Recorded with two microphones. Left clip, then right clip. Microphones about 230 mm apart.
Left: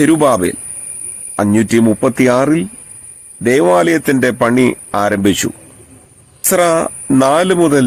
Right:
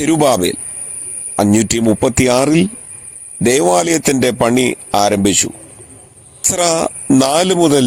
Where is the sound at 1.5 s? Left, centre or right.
Centre.